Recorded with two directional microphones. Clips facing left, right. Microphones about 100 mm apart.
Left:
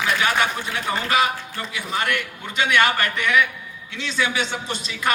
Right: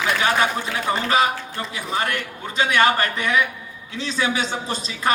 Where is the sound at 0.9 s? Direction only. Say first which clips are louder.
Right 1 dB; 35° right (ahead or behind).